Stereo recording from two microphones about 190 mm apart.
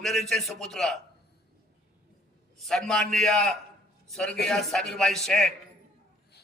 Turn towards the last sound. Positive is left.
turn(degrees=0)  # may be behind; listen again after turning